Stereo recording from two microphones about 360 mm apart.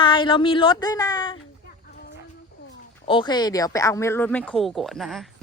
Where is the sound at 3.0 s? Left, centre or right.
Centre.